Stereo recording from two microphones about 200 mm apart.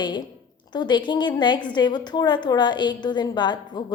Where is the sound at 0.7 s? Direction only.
20° left (ahead or behind).